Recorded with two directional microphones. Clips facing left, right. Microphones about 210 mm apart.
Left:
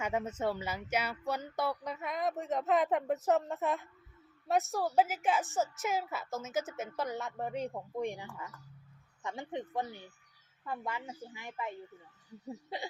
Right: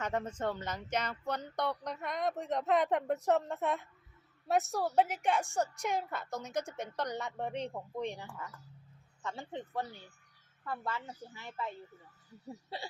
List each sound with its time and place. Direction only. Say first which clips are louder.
0.0 s a woman's voice: left 1 dB; 10° left (ahead or behind)